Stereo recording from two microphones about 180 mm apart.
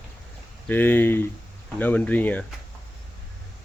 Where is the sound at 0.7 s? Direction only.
10° left (ahead or behind).